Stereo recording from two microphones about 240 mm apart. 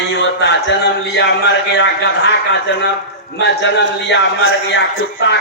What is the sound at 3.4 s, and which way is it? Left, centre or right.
A man's voice, left.